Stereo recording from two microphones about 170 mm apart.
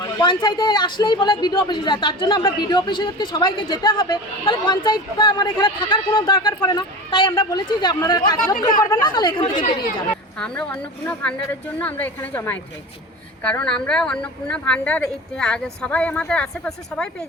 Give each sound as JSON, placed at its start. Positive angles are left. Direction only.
{"t": 0.0, "sound": "speech", "side_deg": 25}
{"t": 10.3, "sound": "a woman's voice", "side_deg": 5}